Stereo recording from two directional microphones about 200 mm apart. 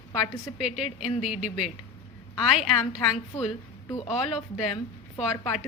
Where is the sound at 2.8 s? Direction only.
20° left (ahead or behind).